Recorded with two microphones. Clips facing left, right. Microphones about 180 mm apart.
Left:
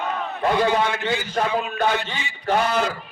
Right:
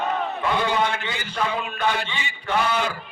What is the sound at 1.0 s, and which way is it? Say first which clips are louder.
A man's voice: left 4 dB; 40° left (ahead or behind).